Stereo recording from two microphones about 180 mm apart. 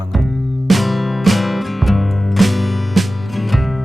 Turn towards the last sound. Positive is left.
turn(degrees=0)  # may be behind; listen again after turning